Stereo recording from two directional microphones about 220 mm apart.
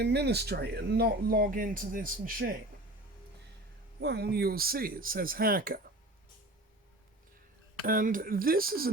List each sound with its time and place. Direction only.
0.0 s speech: 50° right (ahead or behind)
4.0 s speech: 50° right (ahead or behind)
7.9 s speech: 40° right (ahead or behind)